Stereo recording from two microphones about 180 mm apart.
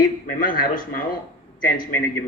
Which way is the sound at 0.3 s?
50° left (ahead or behind).